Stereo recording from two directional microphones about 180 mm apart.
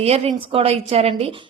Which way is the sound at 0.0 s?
35° right (ahead or behind).